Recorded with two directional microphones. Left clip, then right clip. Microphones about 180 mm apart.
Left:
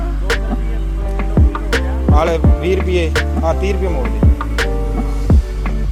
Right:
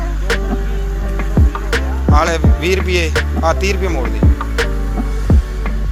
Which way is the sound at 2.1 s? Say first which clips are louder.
Right 1 dB; 15° left (ahead or behind).